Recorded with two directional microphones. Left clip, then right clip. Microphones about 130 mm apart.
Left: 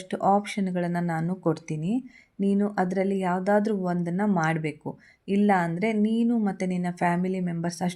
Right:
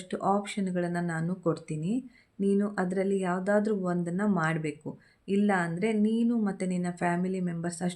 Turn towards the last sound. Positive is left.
turn(degrees=30)  # may be behind; listen again after turning